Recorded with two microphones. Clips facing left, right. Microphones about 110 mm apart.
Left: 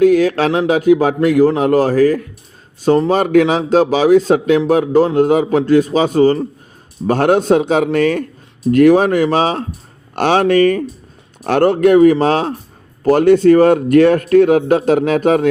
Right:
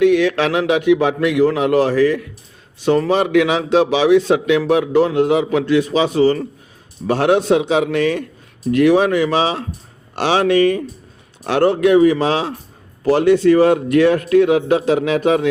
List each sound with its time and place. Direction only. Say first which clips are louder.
0.0 s a man's voice: left 3 dB; 40° left (ahead or behind)